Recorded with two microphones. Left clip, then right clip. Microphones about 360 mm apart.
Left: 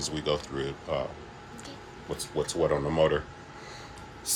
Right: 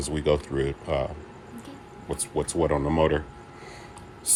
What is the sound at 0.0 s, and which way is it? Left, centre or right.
Speech, centre.